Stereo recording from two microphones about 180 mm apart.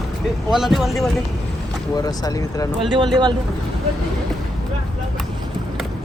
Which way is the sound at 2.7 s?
30° right (ahead or behind).